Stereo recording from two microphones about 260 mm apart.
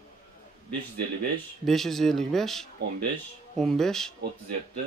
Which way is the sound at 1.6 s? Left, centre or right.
Centre.